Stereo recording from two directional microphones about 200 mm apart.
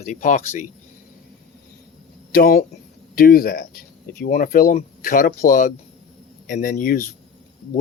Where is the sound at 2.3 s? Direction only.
45° left (ahead or behind).